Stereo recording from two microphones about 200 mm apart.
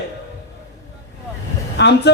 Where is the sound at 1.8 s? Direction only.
60° left (ahead or behind).